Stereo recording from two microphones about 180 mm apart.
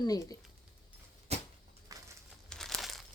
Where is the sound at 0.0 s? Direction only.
20° left (ahead or behind).